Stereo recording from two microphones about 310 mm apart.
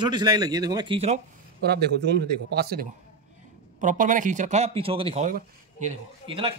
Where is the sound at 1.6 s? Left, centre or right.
Right.